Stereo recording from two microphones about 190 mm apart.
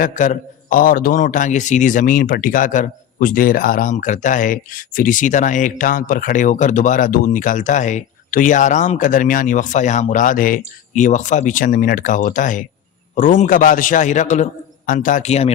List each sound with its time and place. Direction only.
0.0 s a man's voice: 45° left (ahead or behind)